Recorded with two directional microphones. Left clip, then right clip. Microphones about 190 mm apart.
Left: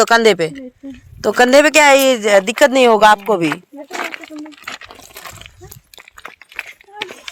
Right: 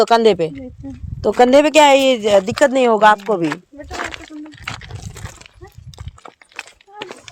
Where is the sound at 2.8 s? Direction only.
15° left (ahead or behind).